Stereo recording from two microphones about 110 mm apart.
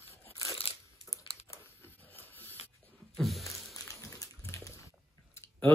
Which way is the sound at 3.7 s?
35° left (ahead or behind).